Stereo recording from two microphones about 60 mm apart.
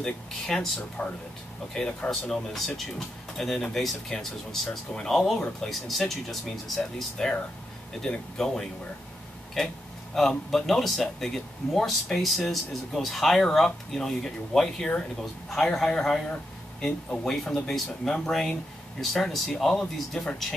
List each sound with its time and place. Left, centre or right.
0.0 s speech: centre
1.0 s speech: left
1.7 s speech: centre